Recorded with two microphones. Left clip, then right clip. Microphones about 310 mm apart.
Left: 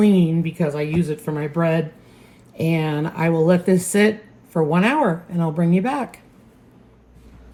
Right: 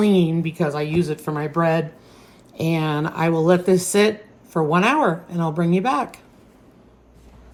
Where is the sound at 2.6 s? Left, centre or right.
Centre.